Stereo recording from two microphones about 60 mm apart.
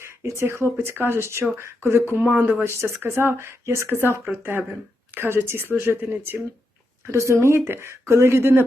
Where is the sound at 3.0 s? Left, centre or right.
Right.